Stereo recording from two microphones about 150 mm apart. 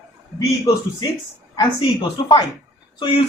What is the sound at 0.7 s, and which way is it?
Speech, 25° left (ahead or behind).